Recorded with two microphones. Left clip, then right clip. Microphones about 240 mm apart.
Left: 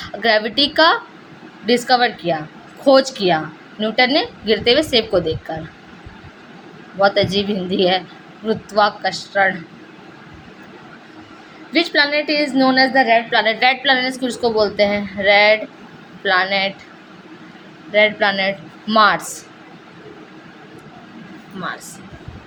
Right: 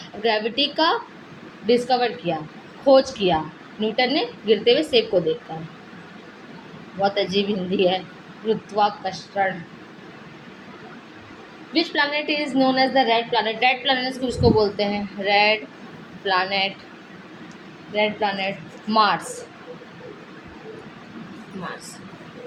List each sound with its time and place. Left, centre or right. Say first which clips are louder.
0.2 s a woman's voice: left 5 dB; left
7.0 s a woman's voice: left 6 dB; left
11.7 s a woman's voice: left 6 dB; left
17.9 s a woman's voice: left 7 dB; left